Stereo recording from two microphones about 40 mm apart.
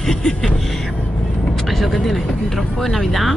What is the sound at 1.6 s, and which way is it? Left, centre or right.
A woman's voice, centre.